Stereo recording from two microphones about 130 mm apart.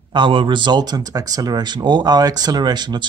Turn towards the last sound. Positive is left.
turn(degrees=-35)  # may be behind; listen again after turning